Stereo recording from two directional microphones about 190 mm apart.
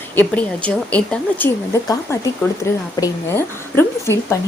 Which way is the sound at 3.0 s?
15° left (ahead or behind).